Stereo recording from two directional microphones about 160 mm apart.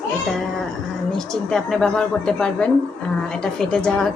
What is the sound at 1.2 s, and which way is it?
A woman's voice, centre (ahead or behind).